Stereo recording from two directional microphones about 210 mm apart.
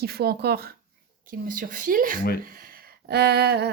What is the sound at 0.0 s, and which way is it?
Speech, 50° right (ahead or behind).